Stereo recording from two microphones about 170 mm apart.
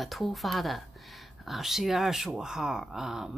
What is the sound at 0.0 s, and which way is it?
Speech, centre (ahead or behind).